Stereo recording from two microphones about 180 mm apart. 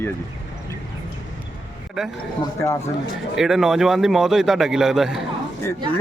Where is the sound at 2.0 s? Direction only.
Centre (ahead or behind).